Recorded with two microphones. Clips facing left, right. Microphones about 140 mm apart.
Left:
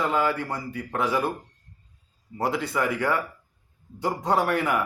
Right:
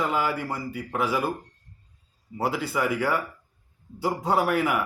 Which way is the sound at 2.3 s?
5° right (ahead or behind).